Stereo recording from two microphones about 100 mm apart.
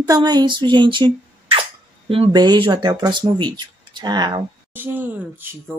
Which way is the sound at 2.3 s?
45° right (ahead or behind).